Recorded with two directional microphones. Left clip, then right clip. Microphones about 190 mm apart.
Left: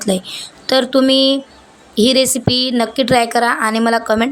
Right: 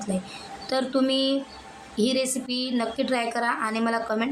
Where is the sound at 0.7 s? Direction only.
45° left (ahead or behind).